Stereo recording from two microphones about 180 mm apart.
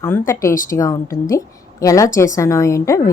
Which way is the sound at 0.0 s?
15° left (ahead or behind).